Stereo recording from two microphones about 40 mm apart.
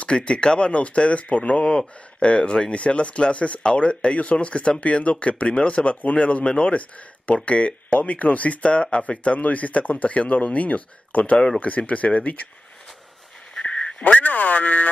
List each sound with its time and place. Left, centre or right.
0.0 s speech: left
13.7 s a sound: left
14.0 s speech: left